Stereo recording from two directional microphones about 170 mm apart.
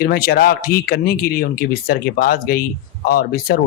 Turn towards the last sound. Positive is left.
turn(degrees=65)  # may be behind; listen again after turning